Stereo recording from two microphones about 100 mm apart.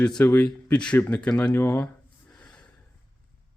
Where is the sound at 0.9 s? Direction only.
15° left (ahead or behind).